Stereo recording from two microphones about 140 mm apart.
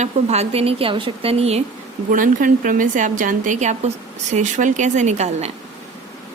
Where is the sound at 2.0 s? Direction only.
75° right (ahead or behind); by 5.5 s 55° right (ahead or behind).